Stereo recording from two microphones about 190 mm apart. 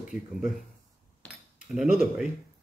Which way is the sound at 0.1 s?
Centre (ahead or behind).